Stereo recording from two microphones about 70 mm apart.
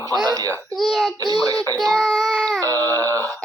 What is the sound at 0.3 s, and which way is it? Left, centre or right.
Baby cry, right.